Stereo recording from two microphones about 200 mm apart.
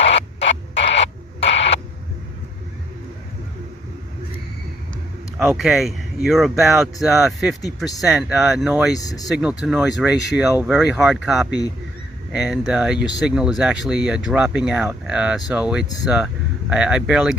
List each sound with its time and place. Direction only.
0.1 s a sound: 30° left (ahead or behind)
0.9 s radio: 30° left (ahead or behind)
5.4 s speech: centre (ahead or behind)
9.0 s speech: 20° left (ahead or behind)
9.3 s speech: 5° right (ahead or behind)